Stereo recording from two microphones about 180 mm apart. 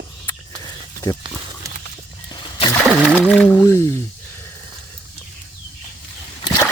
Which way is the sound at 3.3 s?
10° left (ahead or behind).